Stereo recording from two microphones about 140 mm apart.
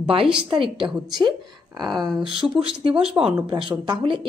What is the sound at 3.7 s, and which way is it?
Speech, 35° right (ahead or behind).